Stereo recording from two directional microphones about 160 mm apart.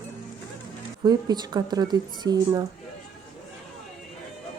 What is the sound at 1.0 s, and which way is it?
Speech, 25° right (ahead or behind).